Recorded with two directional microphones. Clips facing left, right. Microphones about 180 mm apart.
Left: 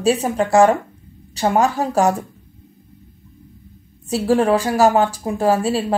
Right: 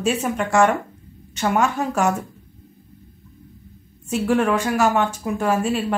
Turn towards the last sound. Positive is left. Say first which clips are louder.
# left 3 dB
turn(degrees=35)  # may be behind; listen again after turning